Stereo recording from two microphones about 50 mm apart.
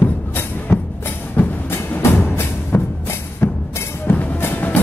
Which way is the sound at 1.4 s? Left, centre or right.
Left.